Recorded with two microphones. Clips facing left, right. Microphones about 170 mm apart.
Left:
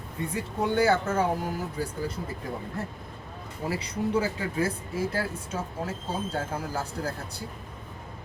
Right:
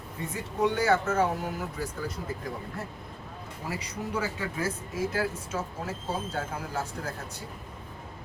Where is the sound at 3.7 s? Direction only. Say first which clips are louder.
Left 6 dB; 30° left (ahead or behind).